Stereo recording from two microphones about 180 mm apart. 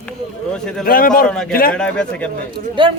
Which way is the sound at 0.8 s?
50° left (ahead or behind).